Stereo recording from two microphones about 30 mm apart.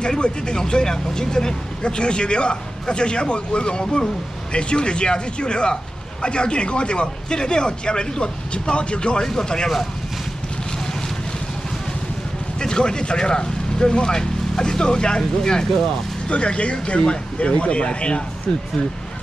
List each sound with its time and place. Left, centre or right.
0.2 s speech: left
1.8 s speech: left
9.2 s speech: left
12.5 s speech: left
16.3 s speech: left